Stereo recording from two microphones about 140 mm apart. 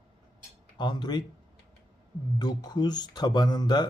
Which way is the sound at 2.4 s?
30° left (ahead or behind).